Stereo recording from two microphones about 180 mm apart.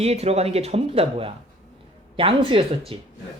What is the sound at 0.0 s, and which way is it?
A woman's voice, 35° right (ahead or behind).